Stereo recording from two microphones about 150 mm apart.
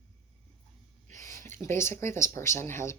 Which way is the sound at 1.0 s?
55° right (ahead or behind).